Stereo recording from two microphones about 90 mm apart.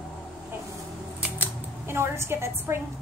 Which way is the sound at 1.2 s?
25° right (ahead or behind).